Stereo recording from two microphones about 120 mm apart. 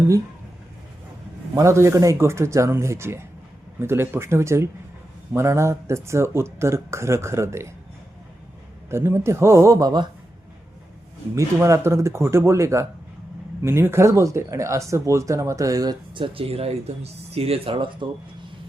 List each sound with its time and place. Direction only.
1.5 s speech: 25° right (ahead or behind)
8.9 s speech: 20° right (ahead or behind)
11.3 s speech: 25° right (ahead or behind); by 18.1 s 45° right (ahead or behind)